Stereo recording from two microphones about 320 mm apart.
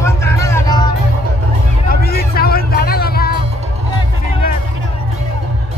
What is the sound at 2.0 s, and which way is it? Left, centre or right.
Vehicle, left.